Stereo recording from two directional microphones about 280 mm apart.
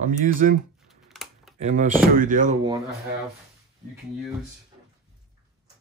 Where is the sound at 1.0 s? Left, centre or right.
Centre.